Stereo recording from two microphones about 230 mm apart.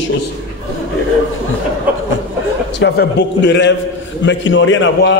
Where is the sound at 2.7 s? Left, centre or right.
Left.